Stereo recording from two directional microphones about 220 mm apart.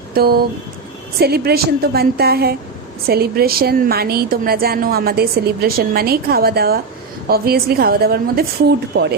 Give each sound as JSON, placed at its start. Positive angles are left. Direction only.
{"t": 0.1, "sound": "a woman's voice", "side_deg": -45}